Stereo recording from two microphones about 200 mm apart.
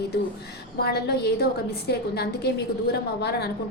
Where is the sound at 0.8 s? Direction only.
55° left (ahead or behind).